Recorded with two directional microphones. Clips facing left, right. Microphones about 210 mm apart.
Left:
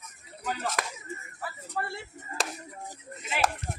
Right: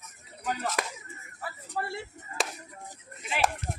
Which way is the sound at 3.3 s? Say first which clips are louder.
Even; centre (ahead or behind).